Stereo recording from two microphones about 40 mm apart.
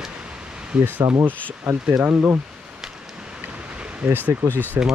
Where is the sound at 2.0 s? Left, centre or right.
Right.